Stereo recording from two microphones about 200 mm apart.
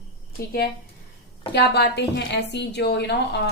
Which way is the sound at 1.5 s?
55° left (ahead or behind).